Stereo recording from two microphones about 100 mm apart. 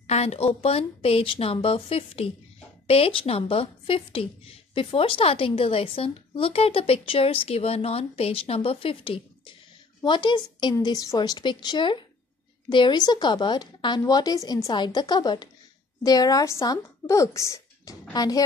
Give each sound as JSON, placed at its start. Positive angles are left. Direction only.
{"t": 0.0, "sound": "a woman's voice", "side_deg": 90}
{"t": 10.0, "sound": "a woman's voice", "side_deg": 50}
{"t": 18.1, "sound": "a woman's voice", "side_deg": 40}